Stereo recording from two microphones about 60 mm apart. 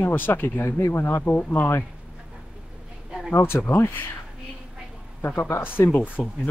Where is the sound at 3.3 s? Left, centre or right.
Left.